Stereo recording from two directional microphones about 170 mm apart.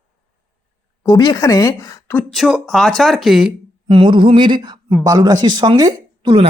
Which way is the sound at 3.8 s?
30° right (ahead or behind).